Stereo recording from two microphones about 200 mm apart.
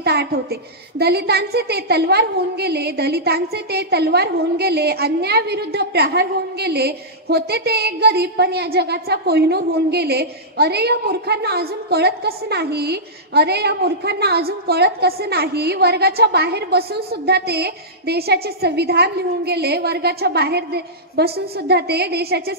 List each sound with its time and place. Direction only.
0.0 s a woman's voice: 55° right (ahead or behind)